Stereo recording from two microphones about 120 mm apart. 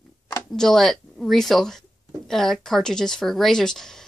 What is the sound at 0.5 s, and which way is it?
Speech, 5° left (ahead or behind).